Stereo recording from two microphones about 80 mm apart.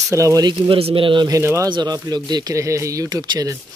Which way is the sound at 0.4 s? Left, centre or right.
Right.